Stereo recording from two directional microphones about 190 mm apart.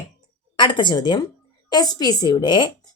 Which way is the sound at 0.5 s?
25° left (ahead or behind).